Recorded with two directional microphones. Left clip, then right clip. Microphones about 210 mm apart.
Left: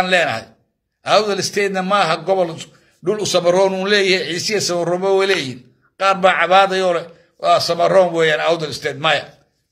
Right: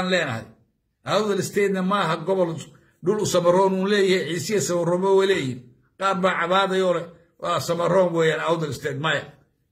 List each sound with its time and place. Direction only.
0.0 s a man's voice: 15° right (ahead or behind)